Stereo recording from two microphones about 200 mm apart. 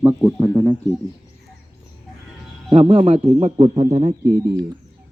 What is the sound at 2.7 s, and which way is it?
A man's voice, 30° right (ahead or behind).